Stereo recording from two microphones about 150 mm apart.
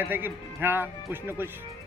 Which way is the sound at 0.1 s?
15° right (ahead or behind).